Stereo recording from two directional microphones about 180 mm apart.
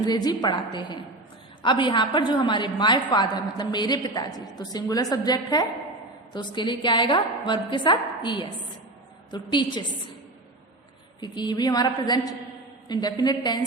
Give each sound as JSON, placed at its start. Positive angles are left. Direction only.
{"t": 0.0, "sound": "a woman's voice", "side_deg": 20}
{"t": 11.2, "sound": "a woman's voice", "side_deg": 25}